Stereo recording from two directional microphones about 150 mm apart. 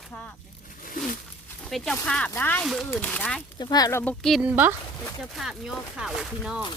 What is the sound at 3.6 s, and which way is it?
Speech, 25° left (ahead or behind).